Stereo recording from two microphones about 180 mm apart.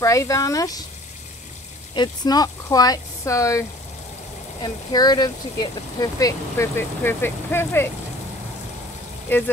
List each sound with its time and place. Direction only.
0.0 s speech: 15° left (ahead or behind)
2.0 s speech: 20° left (ahead or behind)